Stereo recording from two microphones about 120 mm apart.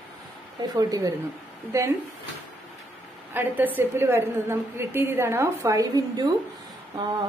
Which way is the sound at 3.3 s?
15° right (ahead or behind).